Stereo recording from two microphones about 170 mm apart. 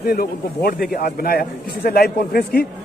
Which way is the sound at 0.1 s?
60° left (ahead or behind).